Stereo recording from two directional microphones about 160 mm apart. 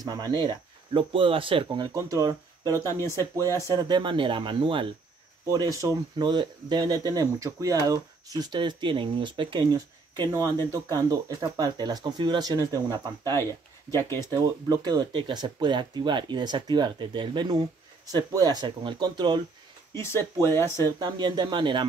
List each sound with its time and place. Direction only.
0.0 s speech: 25° right (ahead or behind)
2.9 s speech: 20° left (ahead or behind)
3.6 s speech: 25° right (ahead or behind)
5.7 s speech: 20° right (ahead or behind)
13.8 s speech: 15° left (ahead or behind)
14.1 s speech: 25° right (ahead or behind)
19.9 s speech: 15° left (ahead or behind)
20.8 s speech: 25° right (ahead or behind)